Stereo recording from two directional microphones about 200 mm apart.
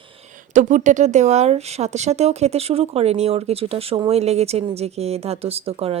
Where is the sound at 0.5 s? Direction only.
35° right (ahead or behind).